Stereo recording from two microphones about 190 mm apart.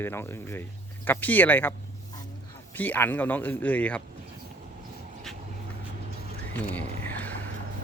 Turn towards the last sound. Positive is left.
turn(degrees=10)  # may be behind; listen again after turning